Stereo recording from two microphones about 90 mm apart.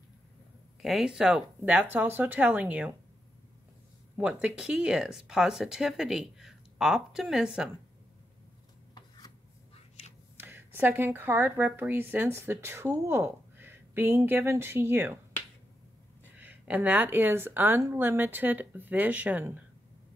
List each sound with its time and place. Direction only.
0.8 s speech: 5° right (ahead or behind)
4.2 s speech: 15° right (ahead or behind)
8.9 s rub: 55° left (ahead or behind)
10.4 s a woman's voice: 20° right (ahead or behind)
16.3 s a woman's voice: 15° right (ahead or behind)